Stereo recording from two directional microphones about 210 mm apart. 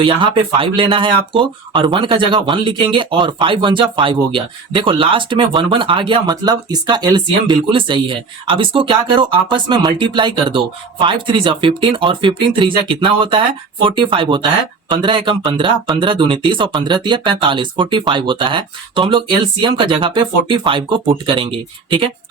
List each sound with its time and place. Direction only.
0.0 s speech: 25° right (ahead or behind)